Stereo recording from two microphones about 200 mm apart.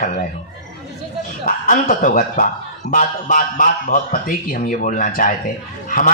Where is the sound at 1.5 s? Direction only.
40° left (ahead or behind).